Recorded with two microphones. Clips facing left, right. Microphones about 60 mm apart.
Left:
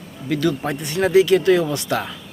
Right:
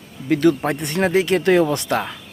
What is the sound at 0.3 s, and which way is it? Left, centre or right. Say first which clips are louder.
Speech: right 4 dB; right.